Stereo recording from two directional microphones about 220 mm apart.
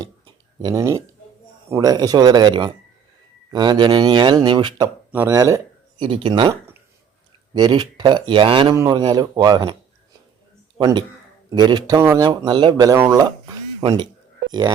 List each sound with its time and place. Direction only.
0.6 s speech: 15° right (ahead or behind)
10.8 s speech: 20° right (ahead or behind)